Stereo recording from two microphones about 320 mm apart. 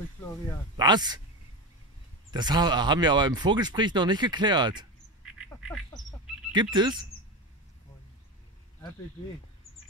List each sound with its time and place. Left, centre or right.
0.7 s speech: centre
2.3 s speech: centre
5.2 s duck: centre
6.5 s speech: centre
9.7 s a sound: left